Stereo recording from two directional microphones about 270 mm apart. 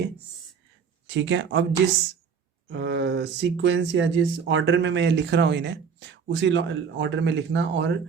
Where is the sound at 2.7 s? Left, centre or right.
Right.